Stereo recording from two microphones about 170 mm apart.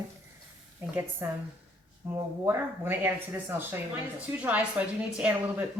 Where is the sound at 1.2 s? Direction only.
10° right (ahead or behind).